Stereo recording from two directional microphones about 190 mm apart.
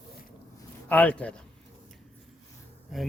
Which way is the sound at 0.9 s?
5° left (ahead or behind).